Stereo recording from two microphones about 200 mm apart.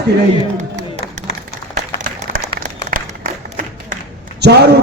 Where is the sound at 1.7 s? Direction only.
40° right (ahead or behind).